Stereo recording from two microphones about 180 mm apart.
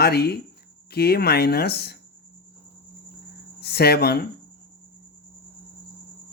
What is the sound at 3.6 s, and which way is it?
Speech, 60° left (ahead or behind).